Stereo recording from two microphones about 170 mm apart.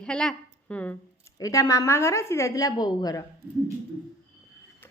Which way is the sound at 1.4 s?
20° left (ahead or behind).